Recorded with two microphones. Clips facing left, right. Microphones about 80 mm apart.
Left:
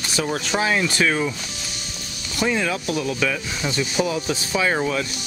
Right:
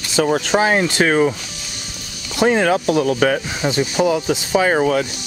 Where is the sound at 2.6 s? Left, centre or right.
Right.